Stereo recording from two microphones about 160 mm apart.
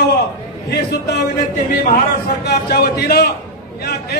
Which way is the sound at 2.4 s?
90° left.